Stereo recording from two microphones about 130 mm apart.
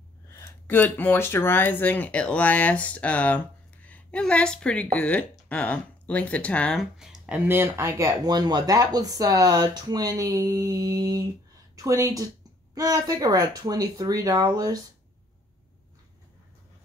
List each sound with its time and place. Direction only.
0.3 s speech: 20° left (ahead or behind)
7.0 s speech: 5° right (ahead or behind)
7.4 s speech: 15° right (ahead or behind)